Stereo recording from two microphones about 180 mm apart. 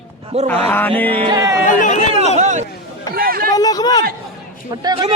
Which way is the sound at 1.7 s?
45° left (ahead or behind).